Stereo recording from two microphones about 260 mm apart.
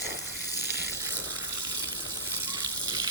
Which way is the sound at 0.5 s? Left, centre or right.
Centre.